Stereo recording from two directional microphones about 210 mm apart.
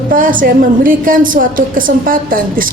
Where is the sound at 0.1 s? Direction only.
40° right (ahead or behind).